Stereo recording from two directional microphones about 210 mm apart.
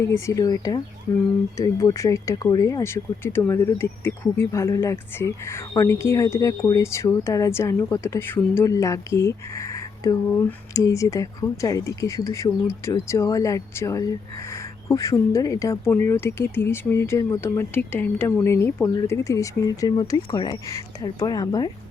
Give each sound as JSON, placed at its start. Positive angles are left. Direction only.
{"t": 0.1, "sound": "speech", "side_deg": 15}